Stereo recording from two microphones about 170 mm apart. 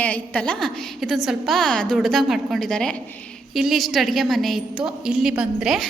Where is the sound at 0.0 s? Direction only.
5° left (ahead or behind).